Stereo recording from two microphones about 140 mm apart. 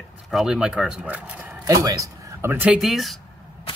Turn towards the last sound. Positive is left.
turn(degrees=0)  # may be behind; listen again after turning